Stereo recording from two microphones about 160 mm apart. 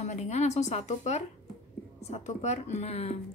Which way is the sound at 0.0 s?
45° left (ahead or behind).